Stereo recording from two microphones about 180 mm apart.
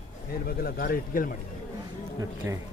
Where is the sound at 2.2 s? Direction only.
15° right (ahead or behind).